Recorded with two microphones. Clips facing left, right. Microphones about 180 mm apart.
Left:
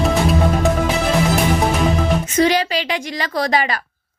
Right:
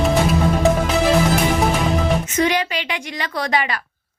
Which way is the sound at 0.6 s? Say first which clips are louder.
Right 4 dB; centre (ahead or behind).